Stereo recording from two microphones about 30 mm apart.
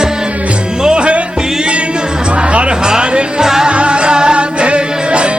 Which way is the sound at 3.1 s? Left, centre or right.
Right.